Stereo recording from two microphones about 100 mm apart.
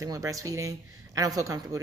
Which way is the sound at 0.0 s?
35° right (ahead or behind).